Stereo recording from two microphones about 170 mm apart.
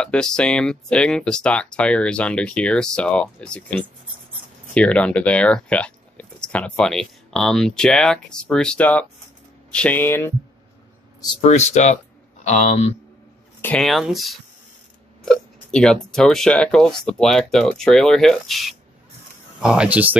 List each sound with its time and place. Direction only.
0.0 s speech: 5° left (ahead or behind)
4.7 s speech: 5° left (ahead or behind)
11.4 s a man's voice: 40° left (ahead or behind)
13.6 s speech: 5° left (ahead or behind); by 20.2 s 10° right (ahead or behind)